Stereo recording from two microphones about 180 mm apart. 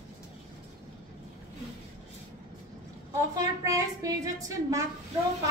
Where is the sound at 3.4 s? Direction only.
20° right (ahead or behind).